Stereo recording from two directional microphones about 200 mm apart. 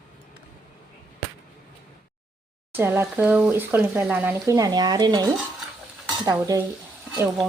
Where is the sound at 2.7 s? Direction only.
10° right (ahead or behind).